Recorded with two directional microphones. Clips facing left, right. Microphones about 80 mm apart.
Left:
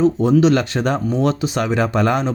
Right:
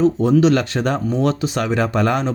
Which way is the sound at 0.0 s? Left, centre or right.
Left.